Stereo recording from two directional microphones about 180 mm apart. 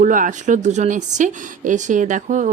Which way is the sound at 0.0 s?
45° right (ahead or behind).